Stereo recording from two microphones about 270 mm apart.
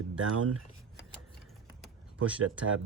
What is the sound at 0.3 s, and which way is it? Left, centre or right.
Speech, right.